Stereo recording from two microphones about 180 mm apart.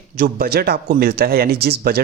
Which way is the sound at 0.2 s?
55° right (ahead or behind).